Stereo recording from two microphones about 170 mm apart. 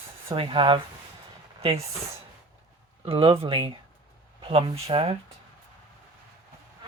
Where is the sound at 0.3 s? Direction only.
30° right (ahead or behind).